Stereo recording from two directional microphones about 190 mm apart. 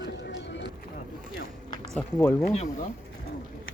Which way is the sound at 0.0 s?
70° left (ahead or behind).